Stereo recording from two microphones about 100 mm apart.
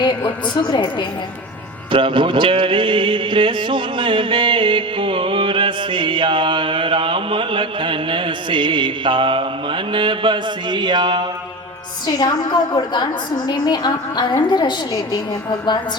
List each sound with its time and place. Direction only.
0.0 s a woman's voice: 50° left (ahead or behind)
1.9 s a sound: 55° right (ahead or behind)
12.0 s a woman's voice: 45° left (ahead or behind)